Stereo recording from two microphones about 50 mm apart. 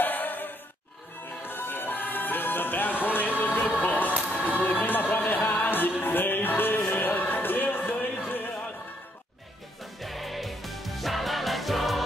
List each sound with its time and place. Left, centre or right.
0.0 s music: left
3.8 s a sound: left
4.6 s music: left
9.9 s music: centre